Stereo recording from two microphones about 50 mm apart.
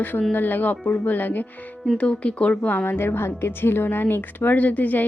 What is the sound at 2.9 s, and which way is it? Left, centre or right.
Speech, left.